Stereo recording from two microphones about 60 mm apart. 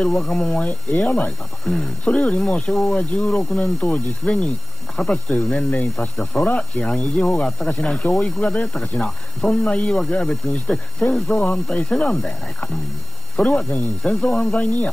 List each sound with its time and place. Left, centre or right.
0.0 s speech: centre